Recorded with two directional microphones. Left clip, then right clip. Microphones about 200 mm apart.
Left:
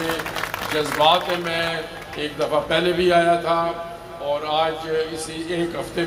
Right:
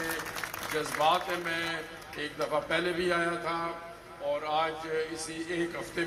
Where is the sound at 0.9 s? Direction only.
20° right (ahead or behind).